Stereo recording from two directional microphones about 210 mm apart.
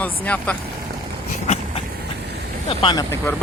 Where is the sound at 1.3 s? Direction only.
35° left (ahead or behind).